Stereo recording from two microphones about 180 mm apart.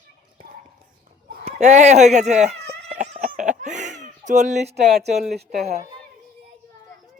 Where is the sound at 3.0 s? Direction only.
45° right (ahead or behind).